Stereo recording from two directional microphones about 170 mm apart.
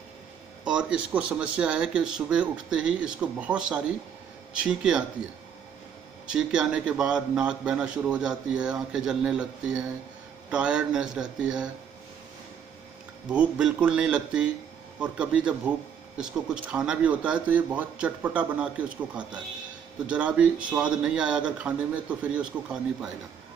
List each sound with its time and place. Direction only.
0.7 s a man's voice: 5° right (ahead or behind)
6.3 s a man's voice: 5° right (ahead or behind)
13.3 s a man's voice: 5° right (ahead or behind)